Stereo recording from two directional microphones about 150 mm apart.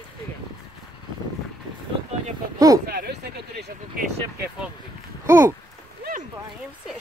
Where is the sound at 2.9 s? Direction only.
90° right.